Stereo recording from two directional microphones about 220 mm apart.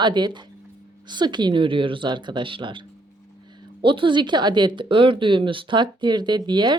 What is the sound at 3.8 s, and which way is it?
Speech, 20° right (ahead or behind).